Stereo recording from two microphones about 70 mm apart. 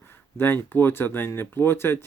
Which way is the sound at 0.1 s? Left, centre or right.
Left.